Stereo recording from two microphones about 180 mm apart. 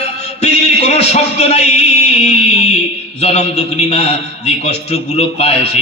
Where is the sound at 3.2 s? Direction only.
35° left (ahead or behind).